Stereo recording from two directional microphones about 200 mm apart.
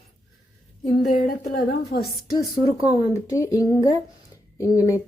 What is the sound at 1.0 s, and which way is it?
Speech, 45° left (ahead or behind).